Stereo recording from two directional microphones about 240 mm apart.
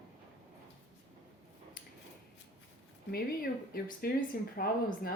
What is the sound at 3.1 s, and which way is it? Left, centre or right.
Speech, left.